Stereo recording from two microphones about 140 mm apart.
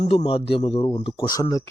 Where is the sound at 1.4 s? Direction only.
25° left (ahead or behind).